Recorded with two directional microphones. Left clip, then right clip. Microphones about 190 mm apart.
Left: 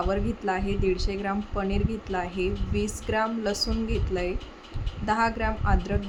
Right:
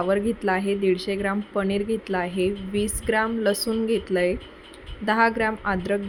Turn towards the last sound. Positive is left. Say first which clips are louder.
# right 4 dB
turn(degrees=-15)  # may be behind; listen again after turning